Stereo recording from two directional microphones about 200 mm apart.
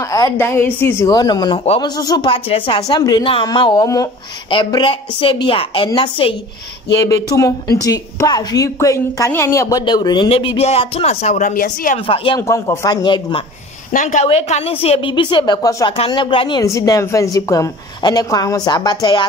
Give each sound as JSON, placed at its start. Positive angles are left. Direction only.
{"t": 0.1, "sound": "a woman's voice", "side_deg": 15}
{"t": 12.4, "sound": "a woman's voice", "side_deg": 15}
{"t": 13.9, "sound": "a woman's voice", "side_deg": 35}